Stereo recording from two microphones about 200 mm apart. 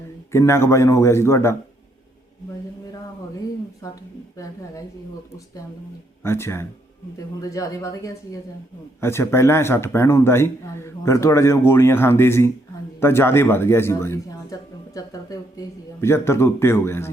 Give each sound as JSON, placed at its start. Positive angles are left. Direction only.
{"t": 0.3, "sound": "speech", "side_deg": 15}
{"t": 6.2, "sound": "speech", "side_deg": 10}